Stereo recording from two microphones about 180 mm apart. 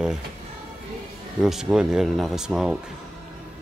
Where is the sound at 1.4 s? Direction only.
5° right (ahead or behind).